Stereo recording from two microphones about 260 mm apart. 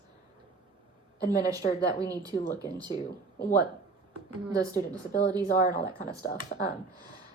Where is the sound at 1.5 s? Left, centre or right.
Centre.